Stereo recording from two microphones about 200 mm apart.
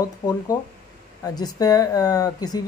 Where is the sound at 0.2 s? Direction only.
15° left (ahead or behind).